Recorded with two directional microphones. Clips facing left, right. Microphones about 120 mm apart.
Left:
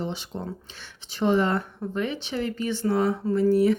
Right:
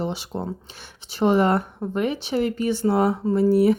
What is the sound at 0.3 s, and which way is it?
Speech, 40° right (ahead or behind).